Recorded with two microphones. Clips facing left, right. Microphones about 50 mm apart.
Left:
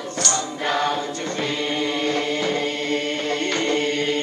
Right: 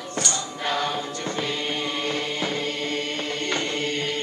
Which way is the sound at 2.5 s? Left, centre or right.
Left.